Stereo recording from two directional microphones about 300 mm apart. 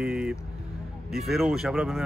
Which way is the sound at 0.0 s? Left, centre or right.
Centre.